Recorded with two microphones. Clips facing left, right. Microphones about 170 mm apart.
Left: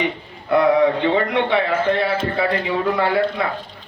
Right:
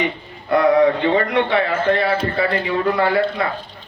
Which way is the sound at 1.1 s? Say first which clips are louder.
Right 1 dB; 5° left (ahead or behind).